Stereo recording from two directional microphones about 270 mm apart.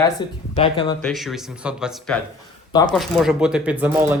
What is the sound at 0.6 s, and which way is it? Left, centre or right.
Speech, centre.